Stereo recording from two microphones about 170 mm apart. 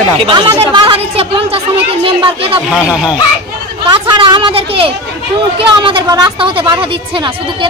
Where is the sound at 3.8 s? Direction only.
25° right (ahead or behind).